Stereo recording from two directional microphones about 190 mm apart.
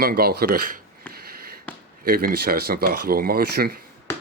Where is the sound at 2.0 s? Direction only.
50° right (ahead or behind).